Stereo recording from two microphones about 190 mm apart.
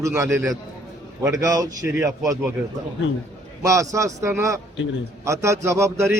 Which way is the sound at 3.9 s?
15° right (ahead or behind).